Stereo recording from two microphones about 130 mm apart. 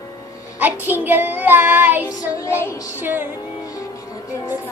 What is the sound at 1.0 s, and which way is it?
Child singing, 15° right (ahead or behind).